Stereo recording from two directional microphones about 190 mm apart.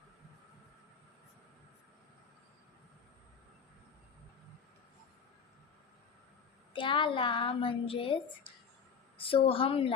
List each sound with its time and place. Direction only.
6.7 s a woman's voice: 25° left (ahead or behind)